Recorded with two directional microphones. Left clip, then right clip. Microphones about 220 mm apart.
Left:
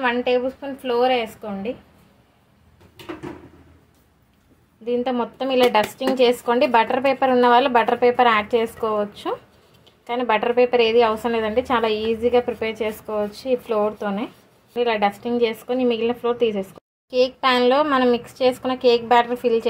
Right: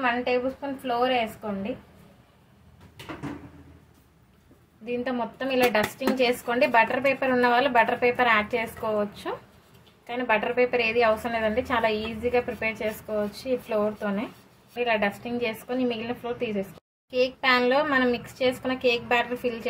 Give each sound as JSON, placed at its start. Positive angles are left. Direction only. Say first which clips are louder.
{"t": 0.0, "sound": "a woman's voice", "louder": "left 5 dB", "side_deg": 40}
{"t": 4.8, "sound": "a woman's voice", "louder": "left 7 dB", "side_deg": 30}